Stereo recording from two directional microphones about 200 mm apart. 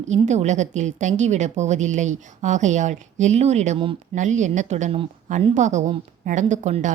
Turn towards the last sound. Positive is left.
turn(degrees=-35)  # may be behind; listen again after turning